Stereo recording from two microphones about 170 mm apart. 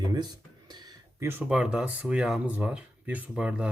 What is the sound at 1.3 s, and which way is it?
Speech, 5° right (ahead or behind).